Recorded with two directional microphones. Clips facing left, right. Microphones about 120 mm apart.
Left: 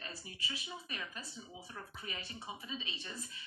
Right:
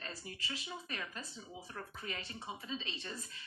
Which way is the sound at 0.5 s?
10° left (ahead or behind).